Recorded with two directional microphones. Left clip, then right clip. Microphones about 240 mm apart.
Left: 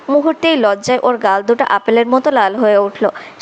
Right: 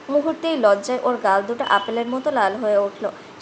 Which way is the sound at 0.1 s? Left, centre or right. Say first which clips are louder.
Left 8 dB; left.